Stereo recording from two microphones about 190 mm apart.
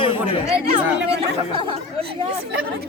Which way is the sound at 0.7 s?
30° right (ahead or behind).